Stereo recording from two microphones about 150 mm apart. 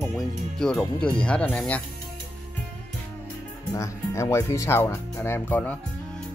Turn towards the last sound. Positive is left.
turn(degrees=10)  # may be behind; listen again after turning